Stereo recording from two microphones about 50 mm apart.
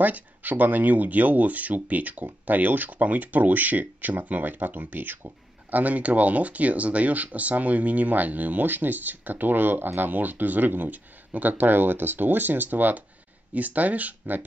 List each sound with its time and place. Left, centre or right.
0.0 s speech: right